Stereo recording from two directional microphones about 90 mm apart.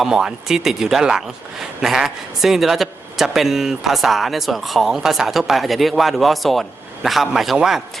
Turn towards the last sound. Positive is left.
turn(degrees=-5)  # may be behind; listen again after turning